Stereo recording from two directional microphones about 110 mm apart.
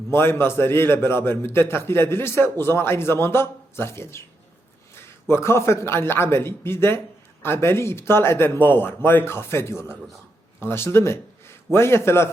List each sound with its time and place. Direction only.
0.1 s a man's voice: 20° left (ahead or behind)
5.3 s a man's voice: 25° left (ahead or behind)